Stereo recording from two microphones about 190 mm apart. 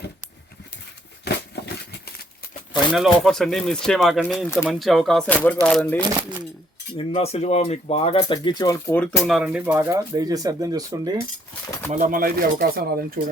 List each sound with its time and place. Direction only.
1.2 s a sound: 60° left (ahead or behind)
2.9 s speech: centre (ahead or behind)
6.1 s speech: 15° right (ahead or behind)
6.9 s speech: 30° left (ahead or behind); by 9.0 s 15° left (ahead or behind)
9.2 s speech: centre (ahead or behind); by 11.2 s 20° right (ahead or behind)
11.9 s speech: 40° right (ahead or behind)